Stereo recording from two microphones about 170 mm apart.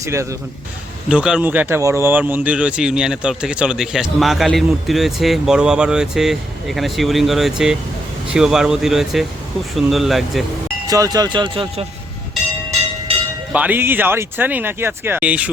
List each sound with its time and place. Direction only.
0.0 s speech: 15° right (ahead or behind)
1.0 s speech: 5° right (ahead or behind)
10.8 s speech: 20° right (ahead or behind)
13.5 s speech: 10° right (ahead or behind)